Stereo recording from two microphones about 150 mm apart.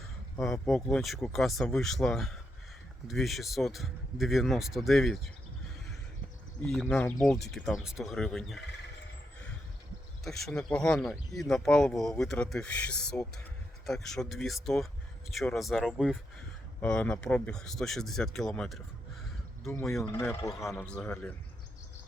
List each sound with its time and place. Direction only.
0.3 s speech: 5° left (ahead or behind)
6.6 s speech: 5° left (ahead or behind)
10.2 s speech: centre (ahead or behind)
20.0 s a man's voice: 20° left (ahead or behind)
20.7 s speech: 5° left (ahead or behind)